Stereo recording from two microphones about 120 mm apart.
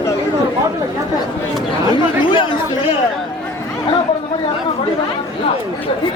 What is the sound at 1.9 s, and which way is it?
Chatter, 40° left (ahead or behind).